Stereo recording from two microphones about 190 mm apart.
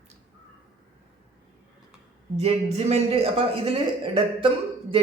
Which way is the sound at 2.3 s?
35° right (ahead or behind).